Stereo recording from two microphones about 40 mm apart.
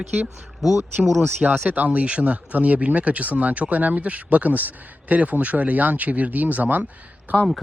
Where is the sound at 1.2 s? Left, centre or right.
Right.